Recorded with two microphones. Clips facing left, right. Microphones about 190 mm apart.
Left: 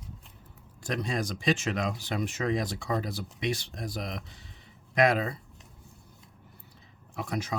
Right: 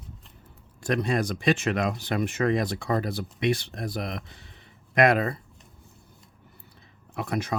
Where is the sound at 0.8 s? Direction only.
60° right (ahead or behind).